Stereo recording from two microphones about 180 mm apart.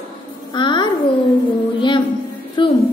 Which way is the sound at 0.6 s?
25° left (ahead or behind).